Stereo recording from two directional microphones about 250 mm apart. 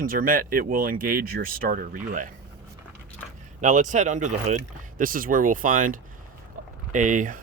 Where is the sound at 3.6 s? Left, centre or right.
Right.